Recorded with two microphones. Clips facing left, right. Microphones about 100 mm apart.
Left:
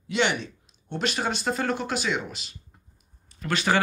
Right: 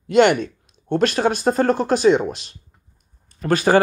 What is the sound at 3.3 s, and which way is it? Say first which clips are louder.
Speech: right 8 dB; 40° right (ahead or behind).